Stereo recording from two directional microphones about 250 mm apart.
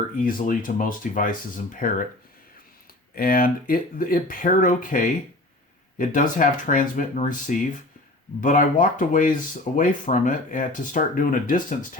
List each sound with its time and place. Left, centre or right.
0.3 s speech: left
3.2 s speech: left